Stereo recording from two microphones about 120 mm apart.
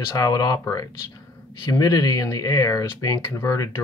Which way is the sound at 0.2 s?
35° left (ahead or behind).